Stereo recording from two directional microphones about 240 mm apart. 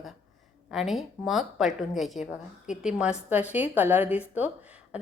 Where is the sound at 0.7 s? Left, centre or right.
Centre.